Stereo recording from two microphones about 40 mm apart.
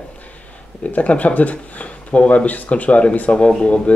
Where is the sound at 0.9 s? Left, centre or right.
Left.